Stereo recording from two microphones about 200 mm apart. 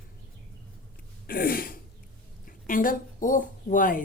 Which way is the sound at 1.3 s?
45° left (ahead or behind).